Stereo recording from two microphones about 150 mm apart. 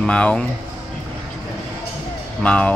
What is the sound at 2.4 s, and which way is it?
Speech, 10° left (ahead or behind).